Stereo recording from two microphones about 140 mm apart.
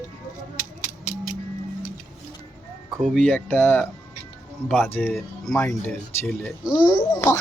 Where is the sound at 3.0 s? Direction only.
5° left (ahead or behind).